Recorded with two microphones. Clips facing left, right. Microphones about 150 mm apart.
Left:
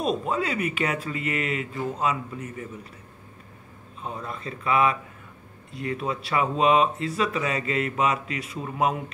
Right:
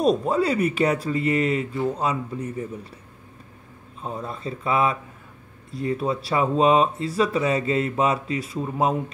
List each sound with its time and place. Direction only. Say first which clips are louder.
0.0 s speech: right 6 dB; 40° right (ahead or behind)
4.0 s speech: right 3 dB; 30° right (ahead or behind)